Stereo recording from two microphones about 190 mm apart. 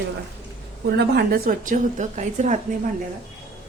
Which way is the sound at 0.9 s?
55° right (ahead or behind).